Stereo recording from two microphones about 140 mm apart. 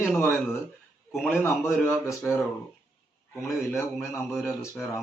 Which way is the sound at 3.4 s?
20° left (ahead or behind).